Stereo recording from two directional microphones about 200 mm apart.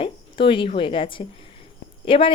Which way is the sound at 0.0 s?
25° left (ahead or behind).